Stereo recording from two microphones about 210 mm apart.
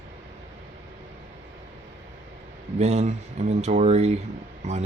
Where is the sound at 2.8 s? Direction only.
30° right (ahead or behind).